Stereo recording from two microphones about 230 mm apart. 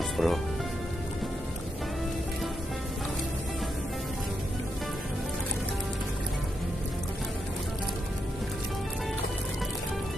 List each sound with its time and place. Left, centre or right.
0.2 s speech: centre